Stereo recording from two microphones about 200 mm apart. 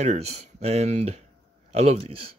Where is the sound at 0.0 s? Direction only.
35° right (ahead or behind).